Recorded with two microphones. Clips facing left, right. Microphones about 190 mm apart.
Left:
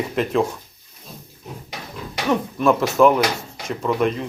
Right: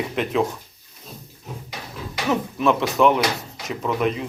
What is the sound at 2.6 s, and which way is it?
Speech, centre (ahead or behind).